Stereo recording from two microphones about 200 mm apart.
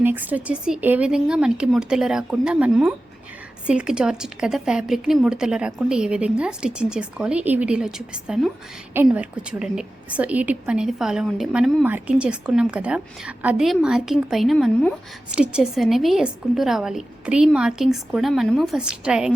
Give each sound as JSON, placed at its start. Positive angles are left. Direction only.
{"t": 0.0, "sound": "a woman's voice", "side_deg": -10}